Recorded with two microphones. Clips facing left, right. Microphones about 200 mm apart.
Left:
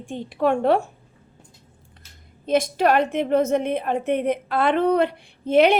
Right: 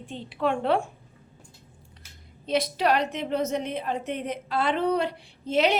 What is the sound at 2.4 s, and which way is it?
A woman's voice, 50° left (ahead or behind).